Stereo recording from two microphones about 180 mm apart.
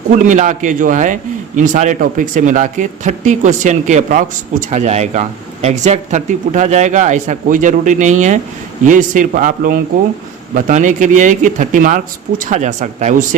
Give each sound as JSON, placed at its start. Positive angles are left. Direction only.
{"t": 0.3, "sound": "a man's voice", "side_deg": -45}